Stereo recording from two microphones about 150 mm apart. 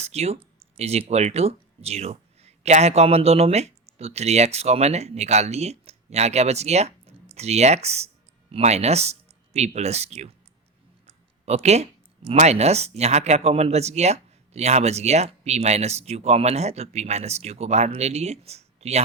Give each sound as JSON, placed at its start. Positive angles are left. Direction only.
{"t": 0.0, "sound": "speech", "side_deg": -45}
{"t": 11.4, "sound": "speech", "side_deg": -45}